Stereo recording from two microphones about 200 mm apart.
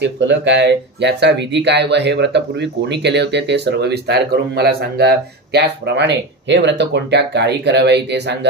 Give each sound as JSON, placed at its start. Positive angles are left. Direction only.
{"t": 0.0, "sound": "speech", "side_deg": -60}